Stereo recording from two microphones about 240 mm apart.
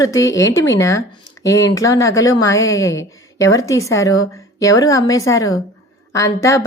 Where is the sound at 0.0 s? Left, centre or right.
Centre.